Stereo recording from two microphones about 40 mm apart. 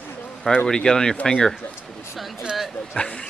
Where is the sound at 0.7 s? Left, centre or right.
Centre.